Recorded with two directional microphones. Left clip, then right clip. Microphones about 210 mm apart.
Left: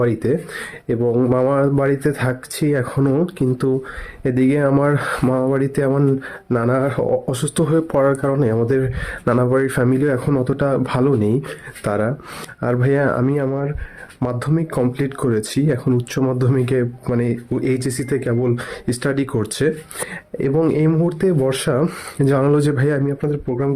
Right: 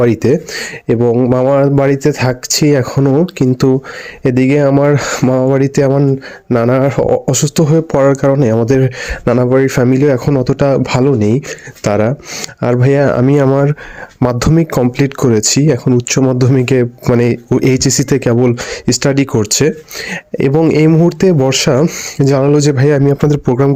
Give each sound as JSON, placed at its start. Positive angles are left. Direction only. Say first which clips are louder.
{"t": 0.0, "sound": "speech", "louder": "right 8 dB", "side_deg": -40}
{"t": 13.3, "sound": "speech", "louder": "right 10 dB", "side_deg": -45}
{"t": 23.0, "sound": "speech", "louder": "right 10 dB", "side_deg": -50}